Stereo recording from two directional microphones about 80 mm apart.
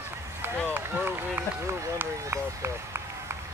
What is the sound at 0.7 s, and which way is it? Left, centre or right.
Speech, right.